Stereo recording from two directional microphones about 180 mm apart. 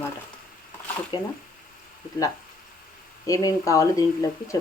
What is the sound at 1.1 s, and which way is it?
Speech, 25° left (ahead or behind).